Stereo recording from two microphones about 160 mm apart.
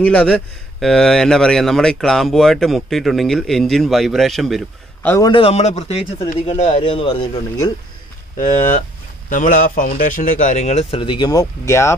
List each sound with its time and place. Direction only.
0.0 s speech: 10° left (ahead or behind)
5.0 s a man's voice: 15° left (ahead or behind)
5.3 s speech: 40° left (ahead or behind)
9.3 s speech: 55° left (ahead or behind)
11.0 s speech: 30° left (ahead or behind)